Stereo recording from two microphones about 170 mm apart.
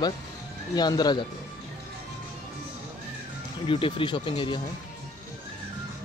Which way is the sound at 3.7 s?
30° left (ahead or behind).